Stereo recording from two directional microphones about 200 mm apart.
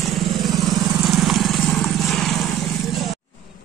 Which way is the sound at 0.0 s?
Centre (ahead or behind).